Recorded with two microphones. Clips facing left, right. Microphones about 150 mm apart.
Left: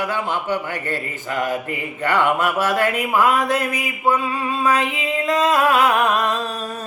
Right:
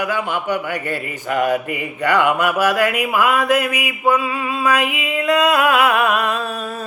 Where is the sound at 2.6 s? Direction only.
25° left (ahead or behind).